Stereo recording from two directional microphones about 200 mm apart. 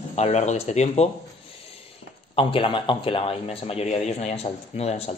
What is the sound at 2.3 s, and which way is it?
A man's voice, 25° left (ahead or behind).